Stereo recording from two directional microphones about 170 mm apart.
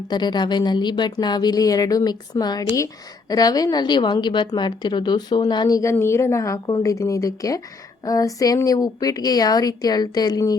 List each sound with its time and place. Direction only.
0.1 s a woman's voice: 25° left (ahead or behind)